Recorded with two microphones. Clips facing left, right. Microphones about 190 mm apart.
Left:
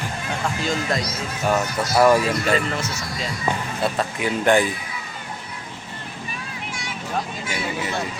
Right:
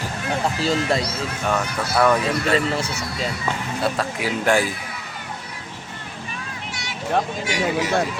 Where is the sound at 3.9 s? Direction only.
Centre (ahead or behind).